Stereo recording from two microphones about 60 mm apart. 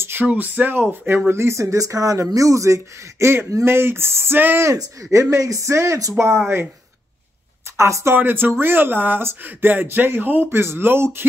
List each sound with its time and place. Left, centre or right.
0.0 s a sound: right
0.3 s speech: right
4.7 s speech: right
7.7 s speech: right
8.2 s speech: right
10.5 s speech: right